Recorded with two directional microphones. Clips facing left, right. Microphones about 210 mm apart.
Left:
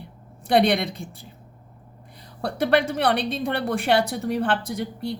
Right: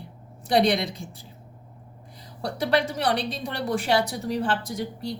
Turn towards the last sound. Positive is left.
turn(degrees=60)  # may be behind; listen again after turning